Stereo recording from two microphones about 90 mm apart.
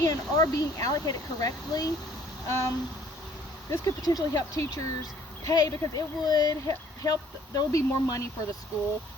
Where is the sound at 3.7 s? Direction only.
40° left (ahead or behind).